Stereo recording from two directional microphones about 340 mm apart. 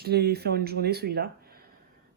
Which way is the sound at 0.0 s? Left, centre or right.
Right.